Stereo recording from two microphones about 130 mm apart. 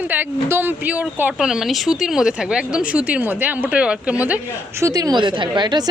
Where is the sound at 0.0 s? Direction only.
15° right (ahead or behind).